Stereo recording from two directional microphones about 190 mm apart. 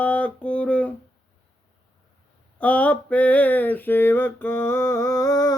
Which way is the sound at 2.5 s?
5° left (ahead or behind).